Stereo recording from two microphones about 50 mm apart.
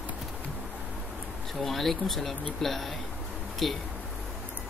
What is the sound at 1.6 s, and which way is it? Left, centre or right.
Speech, centre.